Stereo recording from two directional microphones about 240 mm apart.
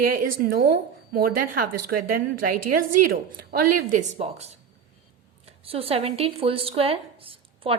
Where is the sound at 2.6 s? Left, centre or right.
Right.